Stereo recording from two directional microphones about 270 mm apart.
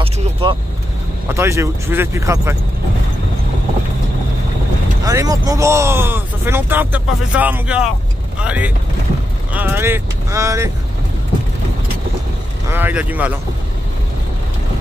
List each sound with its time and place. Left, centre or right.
0.0 s vehicle: centre
1.3 s speech: centre
5.0 s speech: centre
12.6 s speech: centre